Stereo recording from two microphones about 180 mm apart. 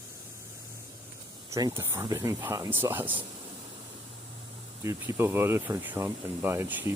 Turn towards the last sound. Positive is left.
turn(degrees=-10)  # may be behind; listen again after turning